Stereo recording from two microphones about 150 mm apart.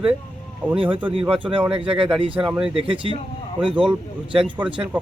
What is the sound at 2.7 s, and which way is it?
Speech, 35° right (ahead or behind).